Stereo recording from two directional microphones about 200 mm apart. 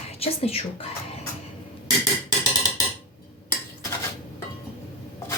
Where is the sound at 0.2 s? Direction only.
30° left (ahead or behind).